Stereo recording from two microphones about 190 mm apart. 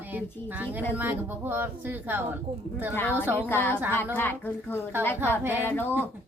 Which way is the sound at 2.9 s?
10° left (ahead or behind).